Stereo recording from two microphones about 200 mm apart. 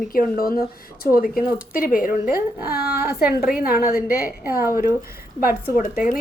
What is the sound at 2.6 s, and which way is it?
Speech, 50° left (ahead or behind).